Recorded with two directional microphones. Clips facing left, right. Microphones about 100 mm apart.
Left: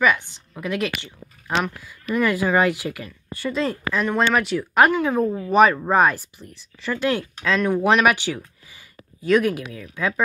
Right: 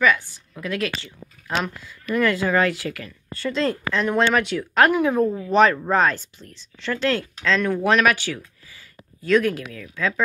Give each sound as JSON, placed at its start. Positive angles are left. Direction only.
{"t": 0.0, "sound": "a woman's voice", "side_deg": 20}
{"t": 2.1, "sound": "speech", "side_deg": 10}